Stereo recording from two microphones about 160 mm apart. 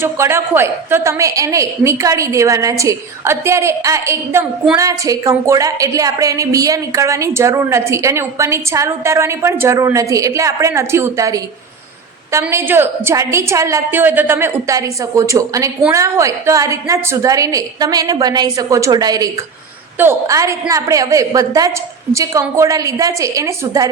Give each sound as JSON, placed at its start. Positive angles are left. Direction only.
{"t": 0.0, "sound": "a woman's voice", "side_deg": -15}